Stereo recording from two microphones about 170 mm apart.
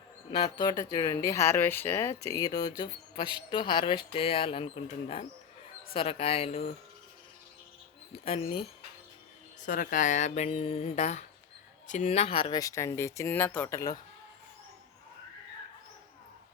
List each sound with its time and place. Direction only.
0.3 s speech: 30° left (ahead or behind)
8.2 s speech: 35° left (ahead or behind)
9.6 s speech: 50° left (ahead or behind); by 14.0 s 20° left (ahead or behind)